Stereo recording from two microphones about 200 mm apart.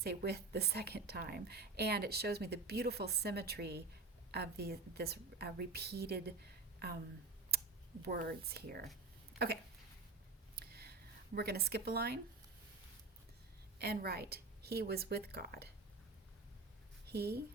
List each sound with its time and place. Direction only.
0.0 s a woman's voice: 55° right (ahead or behind)
8.0 s a woman's voice: 50° right (ahead or behind)
10.5 s a sound: 50° right (ahead or behind)
11.3 s a woman's voice: 50° right (ahead or behind)
13.7 s a woman's voice: 50° right (ahead or behind)
17.1 s speech: 50° right (ahead or behind)